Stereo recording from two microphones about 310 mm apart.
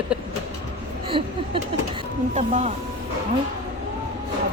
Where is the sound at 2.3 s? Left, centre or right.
Right.